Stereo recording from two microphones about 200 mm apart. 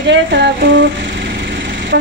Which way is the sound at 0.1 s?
65° right (ahead or behind).